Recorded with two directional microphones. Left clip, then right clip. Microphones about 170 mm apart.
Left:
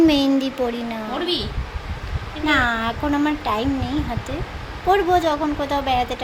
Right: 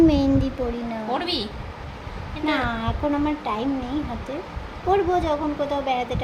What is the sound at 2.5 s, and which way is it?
Speech, 10° left (ahead or behind).